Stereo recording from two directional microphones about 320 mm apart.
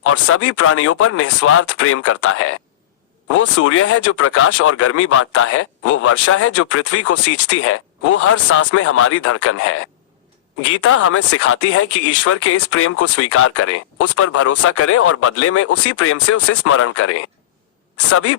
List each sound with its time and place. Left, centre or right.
0.0 s speech: left